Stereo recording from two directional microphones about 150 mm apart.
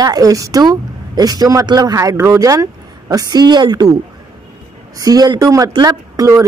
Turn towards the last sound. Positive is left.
turn(degrees=-20)  # may be behind; listen again after turning